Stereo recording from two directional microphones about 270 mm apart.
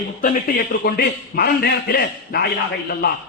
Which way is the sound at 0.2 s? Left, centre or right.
Left.